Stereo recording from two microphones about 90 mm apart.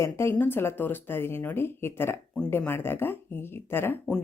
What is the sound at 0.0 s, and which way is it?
A woman's voice, 30° left (ahead or behind).